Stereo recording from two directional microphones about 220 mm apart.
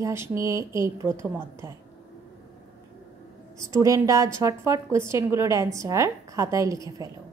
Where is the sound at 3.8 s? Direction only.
15° right (ahead or behind).